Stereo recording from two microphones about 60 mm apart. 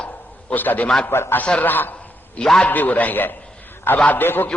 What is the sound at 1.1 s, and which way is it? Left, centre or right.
Speech, left.